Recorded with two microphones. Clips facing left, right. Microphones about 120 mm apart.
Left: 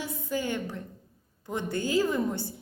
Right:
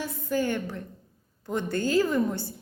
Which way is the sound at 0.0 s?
15° left (ahead or behind).